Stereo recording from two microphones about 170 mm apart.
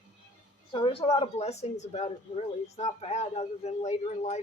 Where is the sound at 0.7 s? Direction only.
30° left (ahead or behind).